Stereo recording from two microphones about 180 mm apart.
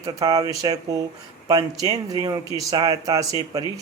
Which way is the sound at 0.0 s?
20° right (ahead or behind).